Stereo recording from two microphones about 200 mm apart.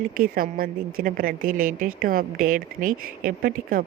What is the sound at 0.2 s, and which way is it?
A woman's voice, 45° right (ahead or behind).